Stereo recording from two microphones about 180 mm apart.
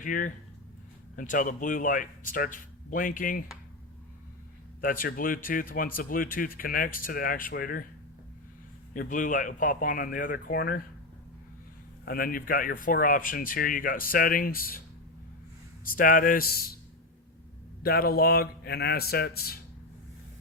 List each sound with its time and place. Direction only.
0.0 s speech: 50° left (ahead or behind)
4.8 s speech: 50° left (ahead or behind)
8.9 s speech: 50° left (ahead or behind)
12.0 s speech: 55° left (ahead or behind)
15.8 s speech: 50° left (ahead or behind)
17.8 s speech: 55° left (ahead or behind)